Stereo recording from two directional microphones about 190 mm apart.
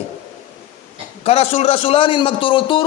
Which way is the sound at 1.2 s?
35° left (ahead or behind).